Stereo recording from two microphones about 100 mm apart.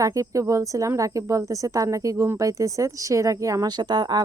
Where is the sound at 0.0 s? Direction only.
30° right (ahead or behind).